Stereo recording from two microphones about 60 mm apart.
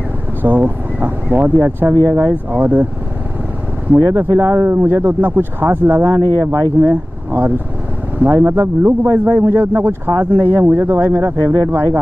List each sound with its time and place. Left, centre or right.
0.4 s speech: right
4.1 s speech: right
6.5 s speech: right
6.9 s speech: right